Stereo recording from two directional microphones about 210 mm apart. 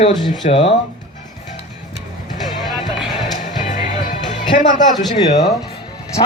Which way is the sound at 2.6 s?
Centre (ahead or behind).